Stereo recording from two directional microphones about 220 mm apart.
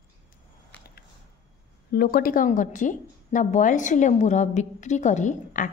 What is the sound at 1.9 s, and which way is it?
A woman's voice, 45° left (ahead or behind).